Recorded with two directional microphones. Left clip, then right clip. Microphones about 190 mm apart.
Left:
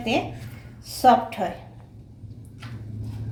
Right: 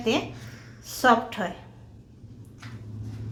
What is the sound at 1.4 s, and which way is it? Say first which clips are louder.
Speech: left 4 dB; 35° right (ahead or behind).